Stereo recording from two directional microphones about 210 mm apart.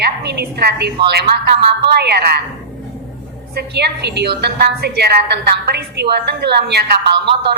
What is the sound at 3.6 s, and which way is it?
A woman's voice, 50° right (ahead or behind).